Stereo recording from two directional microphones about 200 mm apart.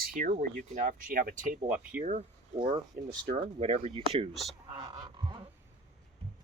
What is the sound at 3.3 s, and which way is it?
Speech, 30° right (ahead or behind).